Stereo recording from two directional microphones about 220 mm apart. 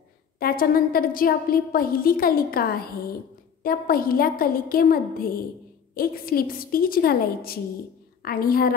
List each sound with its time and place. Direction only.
0.4 s a woman's voice: 40° left (ahead or behind)